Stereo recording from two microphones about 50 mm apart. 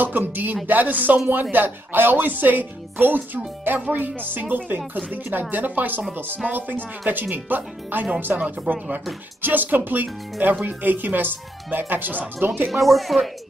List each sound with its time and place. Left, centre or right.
0.0 s a man's voice: right
12.6 s speech: centre